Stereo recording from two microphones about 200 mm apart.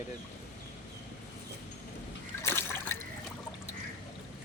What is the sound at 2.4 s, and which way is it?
Liquid, 10° left (ahead or behind).